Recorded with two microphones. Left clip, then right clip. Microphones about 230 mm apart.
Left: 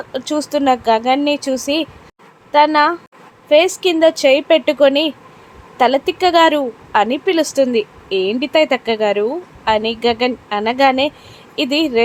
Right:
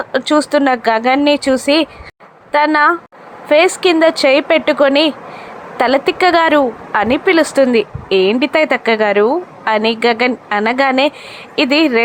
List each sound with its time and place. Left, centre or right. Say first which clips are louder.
0.0 s a woman's voice: right 7 dB; centre